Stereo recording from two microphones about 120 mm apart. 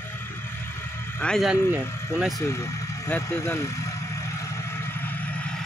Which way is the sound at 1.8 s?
20° left (ahead or behind).